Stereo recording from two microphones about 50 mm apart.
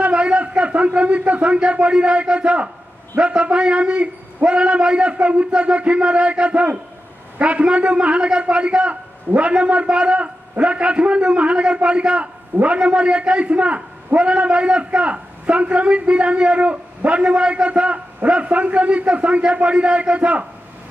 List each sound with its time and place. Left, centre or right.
0.0 s a man's voice: right